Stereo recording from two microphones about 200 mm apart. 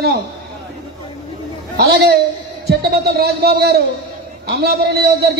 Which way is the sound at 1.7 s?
50° right (ahead or behind).